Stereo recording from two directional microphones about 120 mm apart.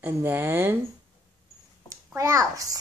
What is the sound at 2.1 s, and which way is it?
Speech, 25° right (ahead or behind).